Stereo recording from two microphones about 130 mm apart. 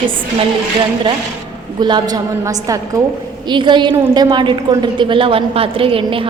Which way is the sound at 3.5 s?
35° right (ahead or behind).